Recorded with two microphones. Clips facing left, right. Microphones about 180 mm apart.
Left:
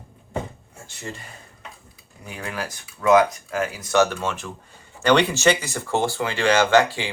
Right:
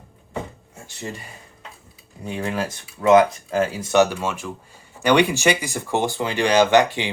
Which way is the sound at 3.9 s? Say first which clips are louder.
Right 2 dB; 15° right (ahead or behind).